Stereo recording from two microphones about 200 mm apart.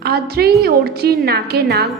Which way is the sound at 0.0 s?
50° right (ahead or behind).